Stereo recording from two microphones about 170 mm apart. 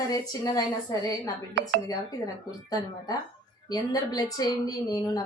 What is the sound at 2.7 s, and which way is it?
A woman's voice, 20° left (ahead or behind).